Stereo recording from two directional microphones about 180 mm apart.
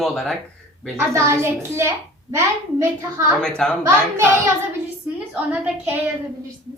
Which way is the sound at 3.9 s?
15° right (ahead or behind).